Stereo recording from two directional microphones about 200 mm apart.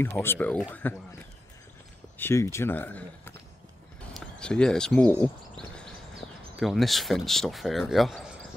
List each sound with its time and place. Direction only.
0.0 s speech: 10° left (ahead or behind)
2.1 s speech: 10° left (ahead or behind)
6.6 s speech: centre (ahead or behind)